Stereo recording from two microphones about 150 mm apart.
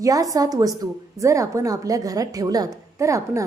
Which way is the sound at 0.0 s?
25° right (ahead or behind).